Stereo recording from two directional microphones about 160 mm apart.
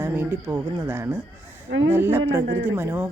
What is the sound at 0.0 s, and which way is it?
Speech, 15° right (ahead or behind).